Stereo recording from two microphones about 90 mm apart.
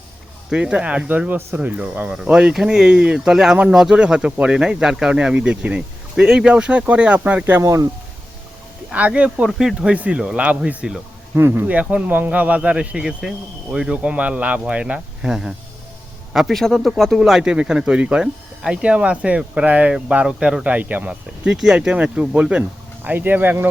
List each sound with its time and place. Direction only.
0.5 s speech: 10° right (ahead or behind)
7.6 s speech: 35° right (ahead or behind)
8.9 s speech: 15° right (ahead or behind)
11.3 s a man's voice: 20° right (ahead or behind)